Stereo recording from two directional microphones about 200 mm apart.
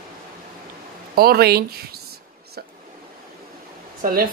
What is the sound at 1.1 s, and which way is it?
Speech, 50° right (ahead or behind).